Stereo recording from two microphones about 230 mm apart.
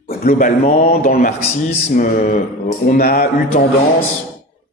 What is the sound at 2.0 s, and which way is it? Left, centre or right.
A man's voice, left.